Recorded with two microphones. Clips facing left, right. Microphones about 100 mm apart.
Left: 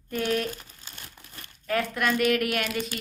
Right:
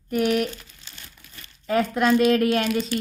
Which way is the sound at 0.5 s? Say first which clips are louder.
Right 1 dB; 45° left (ahead or behind).